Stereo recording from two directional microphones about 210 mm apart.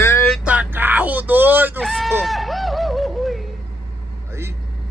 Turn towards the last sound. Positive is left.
turn(degrees=0)  # may be behind; listen again after turning